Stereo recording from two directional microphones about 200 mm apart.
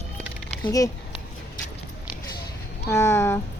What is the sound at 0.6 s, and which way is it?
Speech, 20° left (ahead or behind).